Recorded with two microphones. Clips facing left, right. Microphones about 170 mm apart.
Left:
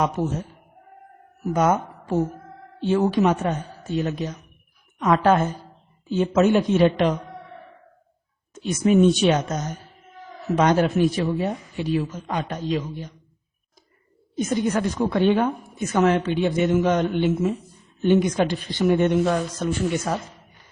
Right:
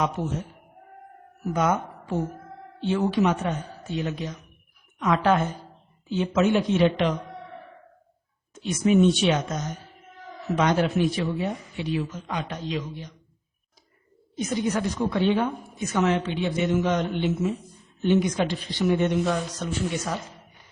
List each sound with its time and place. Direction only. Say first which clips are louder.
1.5 s a woman's voice: left 4 dB; 45° left (ahead or behind)
8.7 s a woman's voice: left 2 dB; 45° left (ahead or behind)
10.6 s a woman's voice: left 4 dB; 45° left (ahead or behind)
14.3 s a woman's voice: left 3 dB; 50° left (ahead or behind)